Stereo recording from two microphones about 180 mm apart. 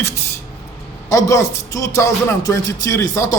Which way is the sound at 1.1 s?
15° left (ahead or behind).